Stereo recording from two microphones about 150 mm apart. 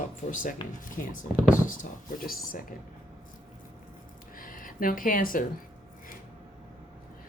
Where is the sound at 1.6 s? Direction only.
65° left (ahead or behind).